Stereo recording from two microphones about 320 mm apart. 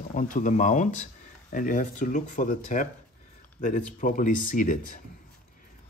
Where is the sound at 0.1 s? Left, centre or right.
Left.